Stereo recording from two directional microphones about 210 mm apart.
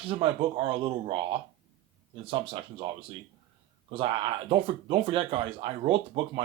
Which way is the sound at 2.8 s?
25° right (ahead or behind).